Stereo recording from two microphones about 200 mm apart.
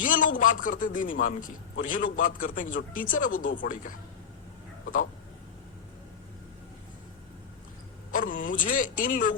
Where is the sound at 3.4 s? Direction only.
70° left (ahead or behind).